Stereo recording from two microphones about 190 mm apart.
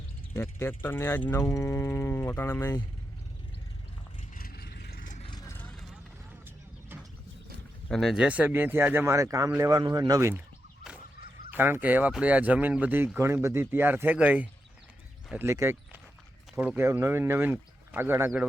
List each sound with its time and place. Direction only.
0.3 s speech: 10° left (ahead or behind)
4.4 s vehicle: 55° left (ahead or behind)
5.2 s vehicle: 20° left (ahead or behind)
5.6 s vehicle: centre (ahead or behind)
7.9 s speech: centre (ahead or behind); by 10.4 s 15° right (ahead or behind)
11.5 s speech: 10° right (ahead or behind)